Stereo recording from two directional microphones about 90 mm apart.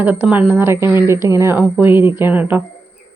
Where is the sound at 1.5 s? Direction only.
25° right (ahead or behind).